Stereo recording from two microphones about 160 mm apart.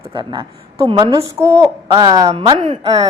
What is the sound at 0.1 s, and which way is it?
A woman's voice, 30° right (ahead or behind).